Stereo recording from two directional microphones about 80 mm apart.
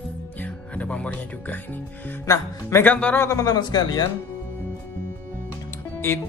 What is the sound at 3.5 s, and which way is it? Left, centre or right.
Speech, left.